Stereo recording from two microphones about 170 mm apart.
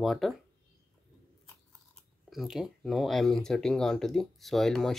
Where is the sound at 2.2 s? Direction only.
Centre (ahead or behind).